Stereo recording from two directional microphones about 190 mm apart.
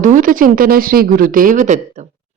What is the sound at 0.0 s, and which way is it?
Speech, 45° right (ahead or behind).